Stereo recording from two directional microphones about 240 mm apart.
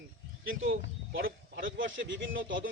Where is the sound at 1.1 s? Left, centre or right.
Right.